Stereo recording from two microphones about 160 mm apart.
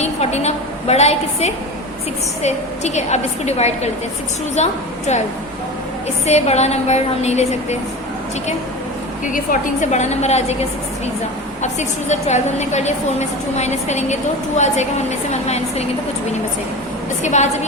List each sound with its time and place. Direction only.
0.0 s a woman's voice: 45° left (ahead or behind)
6.2 s a woman's voice: 45° left (ahead or behind)
9.2 s a woman's voice: 55° left (ahead or behind)
17.2 s a woman's voice: 45° left (ahead or behind)